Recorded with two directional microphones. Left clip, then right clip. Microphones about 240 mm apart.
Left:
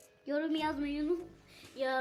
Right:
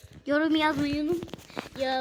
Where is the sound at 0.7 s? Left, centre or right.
Right.